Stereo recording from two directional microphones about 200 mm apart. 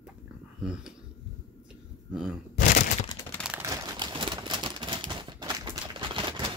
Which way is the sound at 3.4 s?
10° right (ahead or behind).